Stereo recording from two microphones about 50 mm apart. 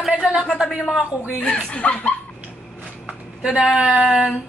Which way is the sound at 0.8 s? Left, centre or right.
Centre.